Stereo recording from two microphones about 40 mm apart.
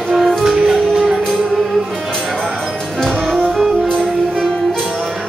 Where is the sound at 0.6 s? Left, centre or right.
Centre.